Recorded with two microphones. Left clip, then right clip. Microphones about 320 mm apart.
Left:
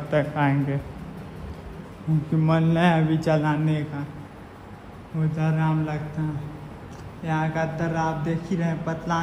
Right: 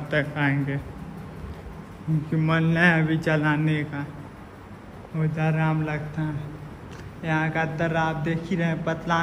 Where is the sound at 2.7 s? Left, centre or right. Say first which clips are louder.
Right 4 dB; centre.